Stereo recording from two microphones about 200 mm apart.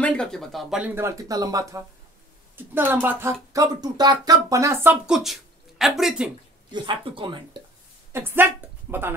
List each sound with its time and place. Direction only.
0.0 s speech: 5° left (ahead or behind)
6.7 s speech: 25° right (ahead or behind)
8.1 s speech: 10° right (ahead or behind)